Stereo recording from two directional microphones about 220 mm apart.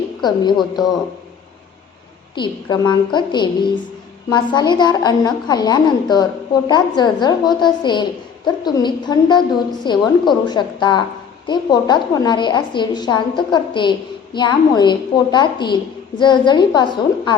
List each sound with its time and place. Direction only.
0.2 s a woman's voice: 20° left (ahead or behind)
2.3 s a woman's voice: 20° left (ahead or behind)